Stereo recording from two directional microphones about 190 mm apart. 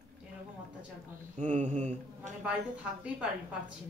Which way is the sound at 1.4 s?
40° right (ahead or behind).